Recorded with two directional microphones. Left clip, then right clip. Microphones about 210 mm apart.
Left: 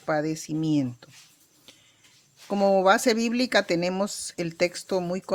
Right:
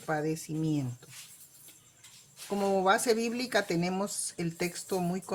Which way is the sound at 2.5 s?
40° left (ahead or behind).